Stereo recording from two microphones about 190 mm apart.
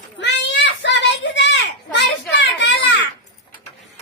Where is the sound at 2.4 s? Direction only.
70° left (ahead or behind).